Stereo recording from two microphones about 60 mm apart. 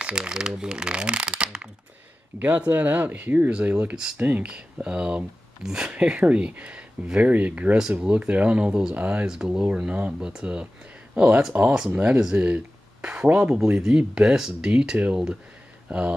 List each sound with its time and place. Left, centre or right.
0.0 s speech: centre
2.3 s speech: right
3.4 s speech: right
9.2 s speech: centre